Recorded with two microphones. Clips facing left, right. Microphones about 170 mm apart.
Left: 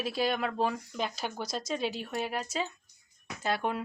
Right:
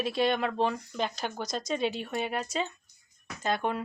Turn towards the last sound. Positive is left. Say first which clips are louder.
# right 1 dB
turn(degrees=10)  # may be behind; listen again after turning